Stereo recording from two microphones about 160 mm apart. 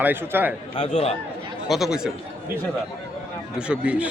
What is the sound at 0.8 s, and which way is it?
Speech, 45° left (ahead or behind).